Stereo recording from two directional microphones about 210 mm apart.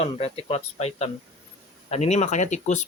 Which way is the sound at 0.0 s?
30° left (ahead or behind).